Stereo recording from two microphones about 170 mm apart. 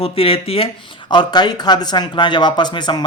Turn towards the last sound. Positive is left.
turn(degrees=25)  # may be behind; listen again after turning